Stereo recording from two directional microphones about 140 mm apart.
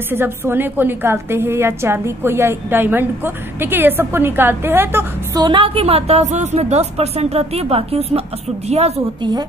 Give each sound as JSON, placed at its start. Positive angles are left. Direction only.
{"t": 0.1, "sound": "a woman's voice", "side_deg": -15}
{"t": 5.3, "sound": "a woman's voice", "side_deg": -35}
{"t": 9.2, "sound": "a woman's voice", "side_deg": -30}